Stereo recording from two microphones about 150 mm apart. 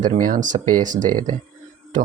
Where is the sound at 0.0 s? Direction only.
60° right (ahead or behind).